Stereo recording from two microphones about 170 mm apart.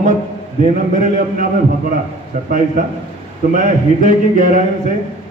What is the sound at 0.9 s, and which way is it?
Speech, 50° right (ahead or behind).